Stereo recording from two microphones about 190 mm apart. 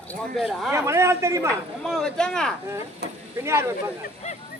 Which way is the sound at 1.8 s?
5° left (ahead or behind).